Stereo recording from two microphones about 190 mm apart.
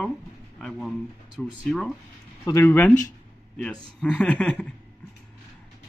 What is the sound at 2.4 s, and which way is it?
A man's voice, 15° left (ahead or behind).